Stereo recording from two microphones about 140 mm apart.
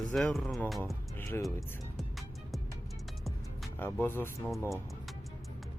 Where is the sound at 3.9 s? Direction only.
15° left (ahead or behind).